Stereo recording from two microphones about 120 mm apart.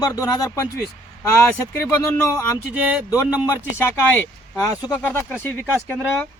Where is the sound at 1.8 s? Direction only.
25° left (ahead or behind).